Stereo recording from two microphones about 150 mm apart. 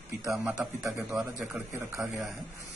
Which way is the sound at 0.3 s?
10° right (ahead or behind).